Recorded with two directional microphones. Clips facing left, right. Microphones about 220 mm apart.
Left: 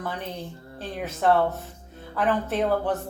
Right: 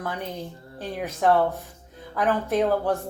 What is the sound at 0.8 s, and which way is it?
Speech, 15° right (ahead or behind).